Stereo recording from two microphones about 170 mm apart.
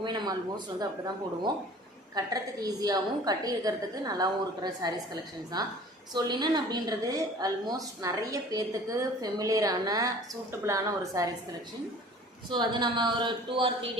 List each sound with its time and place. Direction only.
0.0 s a woman's voice: 25° right (ahead or behind)
12.5 s a woman's voice: 25° right (ahead or behind)